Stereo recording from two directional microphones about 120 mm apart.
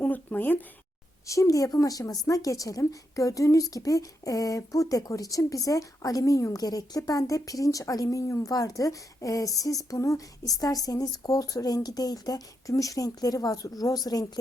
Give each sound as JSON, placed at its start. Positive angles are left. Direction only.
{"t": 0.0, "sound": "speech", "side_deg": 15}
{"t": 1.3, "sound": "speech", "side_deg": 25}